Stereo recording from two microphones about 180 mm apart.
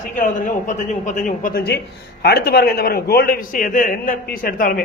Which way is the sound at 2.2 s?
65° left (ahead or behind).